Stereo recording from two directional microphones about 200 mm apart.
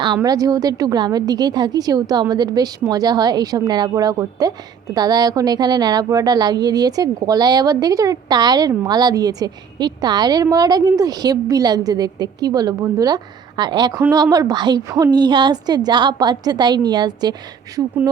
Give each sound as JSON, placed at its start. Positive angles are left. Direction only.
{"t": 0.0, "sound": "a woman's voice", "side_deg": -20}